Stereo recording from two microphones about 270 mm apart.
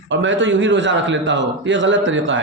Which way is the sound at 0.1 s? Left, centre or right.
Right.